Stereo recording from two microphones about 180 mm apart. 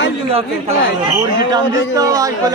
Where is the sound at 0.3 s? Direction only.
30° right (ahead or behind).